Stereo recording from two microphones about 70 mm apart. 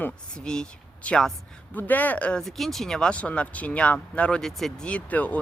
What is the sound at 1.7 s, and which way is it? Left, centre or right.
Speech, left.